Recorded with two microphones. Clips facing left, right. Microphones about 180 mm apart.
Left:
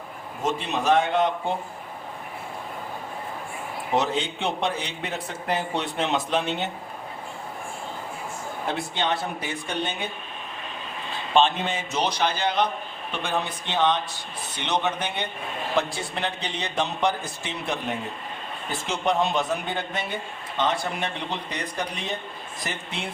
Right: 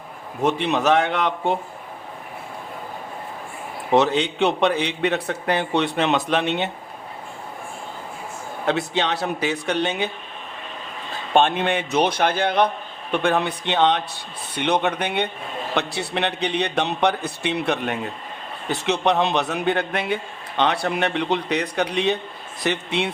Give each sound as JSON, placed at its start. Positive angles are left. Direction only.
{"t": 0.4, "sound": "a man's voice", "side_deg": -70}
{"t": 3.9, "sound": "a man's voice", "side_deg": -70}
{"t": 8.6, "sound": "a man's voice", "side_deg": -80}
{"t": 11.3, "sound": "a man's voice", "side_deg": -60}